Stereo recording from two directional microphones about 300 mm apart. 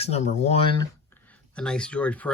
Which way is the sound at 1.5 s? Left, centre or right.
Centre.